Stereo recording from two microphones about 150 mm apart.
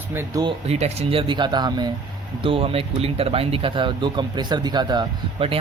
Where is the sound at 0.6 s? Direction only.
45° right (ahead or behind).